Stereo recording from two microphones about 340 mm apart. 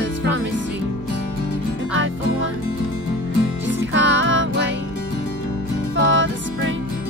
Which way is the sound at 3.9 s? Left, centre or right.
Right.